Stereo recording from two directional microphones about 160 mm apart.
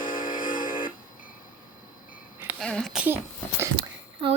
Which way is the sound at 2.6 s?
5° left (ahead or behind).